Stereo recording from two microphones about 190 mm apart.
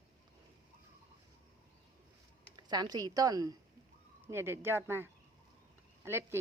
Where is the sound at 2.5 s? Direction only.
20° right (ahead or behind).